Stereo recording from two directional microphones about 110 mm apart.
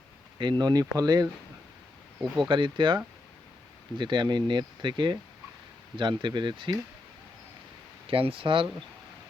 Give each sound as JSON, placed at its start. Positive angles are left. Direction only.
{"t": 0.3, "sound": "speech", "side_deg": -45}
{"t": 2.5, "sound": "speech", "side_deg": -45}
{"t": 8.0, "sound": "speech", "side_deg": -55}